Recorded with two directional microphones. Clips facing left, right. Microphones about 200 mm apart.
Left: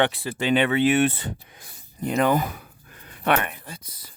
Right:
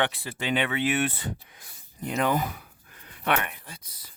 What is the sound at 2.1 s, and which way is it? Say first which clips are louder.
Speech: left 4 dB; 45° left (ahead or behind).